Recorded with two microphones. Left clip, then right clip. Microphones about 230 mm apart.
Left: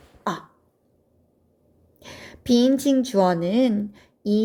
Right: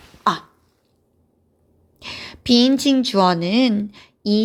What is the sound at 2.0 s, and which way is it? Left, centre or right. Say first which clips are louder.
Speech: right 5 dB; centre.